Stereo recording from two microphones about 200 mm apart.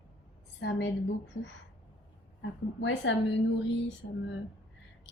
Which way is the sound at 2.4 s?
65° left (ahead or behind).